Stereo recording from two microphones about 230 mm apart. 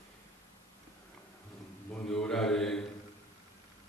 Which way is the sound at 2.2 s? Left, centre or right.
Centre.